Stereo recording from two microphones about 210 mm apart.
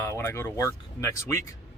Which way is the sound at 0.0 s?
10° left (ahead or behind).